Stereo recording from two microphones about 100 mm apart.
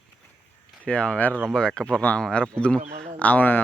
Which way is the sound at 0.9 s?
10° left (ahead or behind).